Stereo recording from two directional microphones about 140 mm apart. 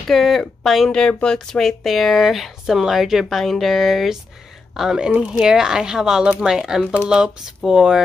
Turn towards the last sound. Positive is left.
turn(degrees=-5)  # may be behind; listen again after turning